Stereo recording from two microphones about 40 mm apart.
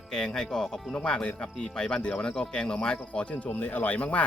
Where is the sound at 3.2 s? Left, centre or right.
Left.